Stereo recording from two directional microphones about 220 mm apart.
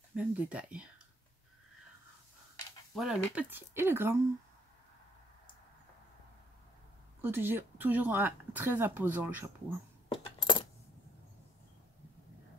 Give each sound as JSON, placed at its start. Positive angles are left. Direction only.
{"t": 0.1, "sound": "speech", "side_deg": -5}
{"t": 2.9, "sound": "speech", "side_deg": 0}
{"t": 7.2, "sound": "speech", "side_deg": -10}
{"t": 10.1, "sound": "coin", "side_deg": 25}